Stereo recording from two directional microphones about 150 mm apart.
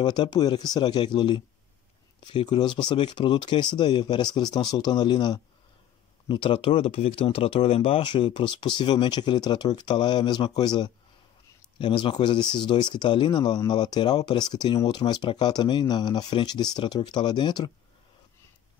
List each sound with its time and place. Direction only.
0.0 s speech: 30° left (ahead or behind)